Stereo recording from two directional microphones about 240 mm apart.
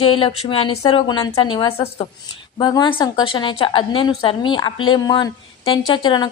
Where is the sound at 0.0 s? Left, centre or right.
Left.